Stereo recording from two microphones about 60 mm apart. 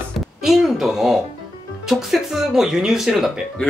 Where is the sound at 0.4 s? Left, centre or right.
Centre.